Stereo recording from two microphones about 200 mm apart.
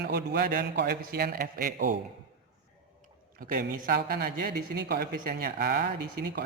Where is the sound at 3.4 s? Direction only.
45° right (ahead or behind).